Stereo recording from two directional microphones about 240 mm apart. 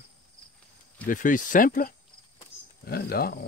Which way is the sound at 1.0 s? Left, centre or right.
Left.